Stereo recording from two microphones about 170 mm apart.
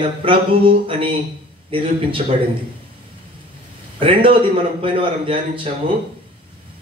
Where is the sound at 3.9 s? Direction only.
30° right (ahead or behind).